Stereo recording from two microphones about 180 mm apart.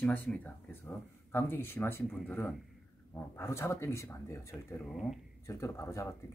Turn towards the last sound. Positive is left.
turn(degrees=15)  # may be behind; listen again after turning